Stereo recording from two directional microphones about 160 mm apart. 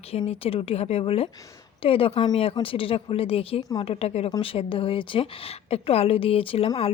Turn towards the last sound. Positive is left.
turn(degrees=35)  # may be behind; listen again after turning